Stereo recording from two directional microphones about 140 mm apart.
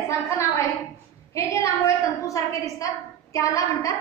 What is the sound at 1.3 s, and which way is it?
A woman's voice, 20° left (ahead or behind).